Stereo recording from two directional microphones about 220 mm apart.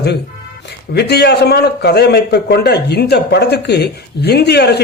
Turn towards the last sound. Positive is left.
turn(degrees=50)  # may be behind; listen again after turning